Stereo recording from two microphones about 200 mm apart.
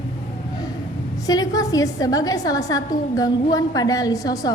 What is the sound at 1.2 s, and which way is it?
A woman's voice, 20° left (ahead or behind).